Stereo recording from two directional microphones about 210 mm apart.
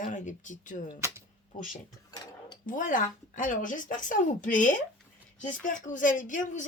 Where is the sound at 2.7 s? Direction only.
40° left (ahead or behind).